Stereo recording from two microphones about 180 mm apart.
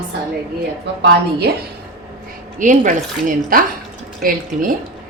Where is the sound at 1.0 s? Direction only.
65° right (ahead or behind).